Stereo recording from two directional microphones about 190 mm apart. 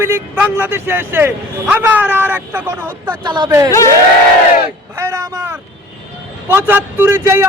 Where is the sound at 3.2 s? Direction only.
25° right (ahead or behind).